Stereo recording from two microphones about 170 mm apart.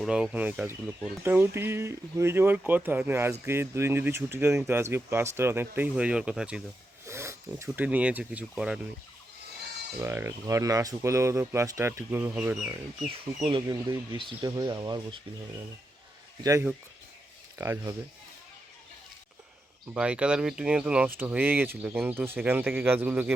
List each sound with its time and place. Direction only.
0.0 s speech: 5° right (ahead or behind)
7.0 s speech: 15° right (ahead or behind)
10.0 s speech: 15° right (ahead or behind)
13.1 s speech: 30° right (ahead or behind)
16.4 s speech: 15° right (ahead or behind)
19.9 s speech: 5° right (ahead or behind)